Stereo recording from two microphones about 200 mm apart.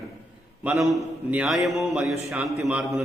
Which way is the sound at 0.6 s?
Centre (ahead or behind).